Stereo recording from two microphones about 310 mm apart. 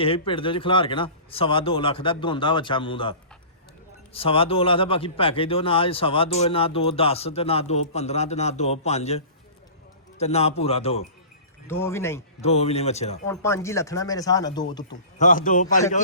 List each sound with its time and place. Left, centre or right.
0.0 s a man's voice: centre
11.7 s a man's voice: centre
12.4 s a man's voice: centre
13.2 s a man's voice: centre
15.2 s a man's voice: left